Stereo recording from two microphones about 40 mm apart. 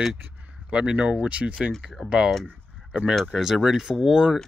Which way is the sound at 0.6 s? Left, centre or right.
Right.